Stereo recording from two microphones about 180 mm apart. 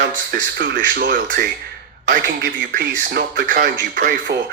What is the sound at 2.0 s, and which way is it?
Speech, 70° right (ahead or behind).